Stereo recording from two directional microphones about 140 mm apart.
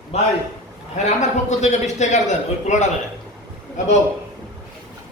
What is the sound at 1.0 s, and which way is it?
A man's voice, 55° left (ahead or behind).